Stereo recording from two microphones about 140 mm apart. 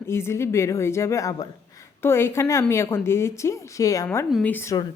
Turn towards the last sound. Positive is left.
turn(degrees=15)  # may be behind; listen again after turning